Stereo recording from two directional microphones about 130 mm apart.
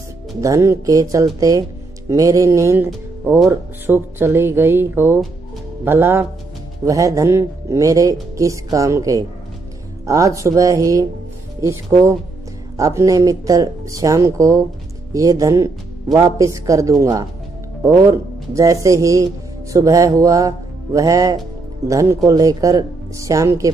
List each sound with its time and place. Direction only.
0.4 s speech: 25° right (ahead or behind)
2.0 s music: 25° right (ahead or behind)
3.4 s speech: 15° right (ahead or behind)